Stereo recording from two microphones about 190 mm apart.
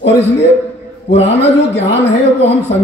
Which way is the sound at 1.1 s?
35° left (ahead or behind).